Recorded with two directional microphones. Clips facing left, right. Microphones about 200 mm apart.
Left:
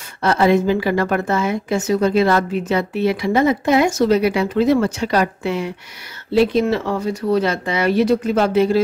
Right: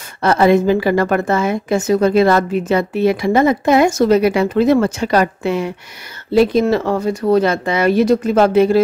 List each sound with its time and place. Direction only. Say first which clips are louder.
0.2 s a woman's voice: right 3 dB; 50° right (ahead or behind)